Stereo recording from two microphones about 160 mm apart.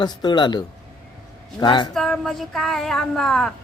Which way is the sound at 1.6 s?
30° left (ahead or behind).